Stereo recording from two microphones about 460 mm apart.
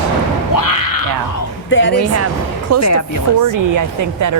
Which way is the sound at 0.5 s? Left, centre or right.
Left.